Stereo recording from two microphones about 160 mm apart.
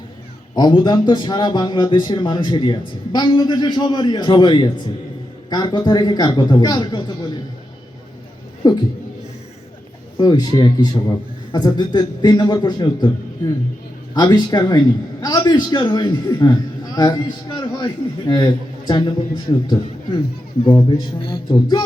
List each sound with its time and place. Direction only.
0.5 s a man's voice: 25° left (ahead or behind)
8.6 s a man's voice: 25° left (ahead or behind)
10.2 s a man's voice: 25° left (ahead or behind)